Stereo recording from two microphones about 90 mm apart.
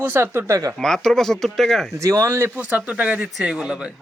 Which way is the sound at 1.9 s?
35° right (ahead or behind).